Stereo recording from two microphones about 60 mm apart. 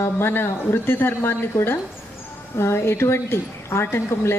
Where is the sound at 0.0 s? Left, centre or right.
Left.